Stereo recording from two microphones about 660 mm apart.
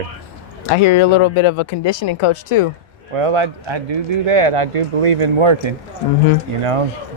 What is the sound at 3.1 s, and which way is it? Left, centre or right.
Speech, right.